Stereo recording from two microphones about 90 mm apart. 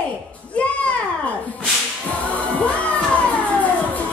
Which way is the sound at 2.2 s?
15° left (ahead or behind).